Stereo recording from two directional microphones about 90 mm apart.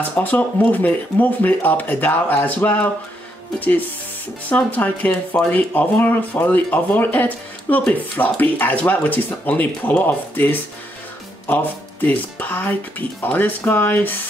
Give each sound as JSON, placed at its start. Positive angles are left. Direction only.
{"t": 0.1, "sound": "speech", "side_deg": 20}